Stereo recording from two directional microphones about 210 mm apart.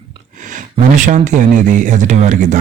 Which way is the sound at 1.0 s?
35° right (ahead or behind).